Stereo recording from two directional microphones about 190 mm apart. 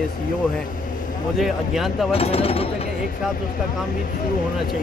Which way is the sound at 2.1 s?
30° left (ahead or behind).